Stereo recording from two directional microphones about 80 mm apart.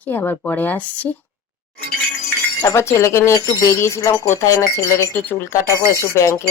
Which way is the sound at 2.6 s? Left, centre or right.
Left.